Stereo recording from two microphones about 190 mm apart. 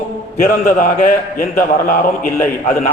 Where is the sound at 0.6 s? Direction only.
45° left (ahead or behind).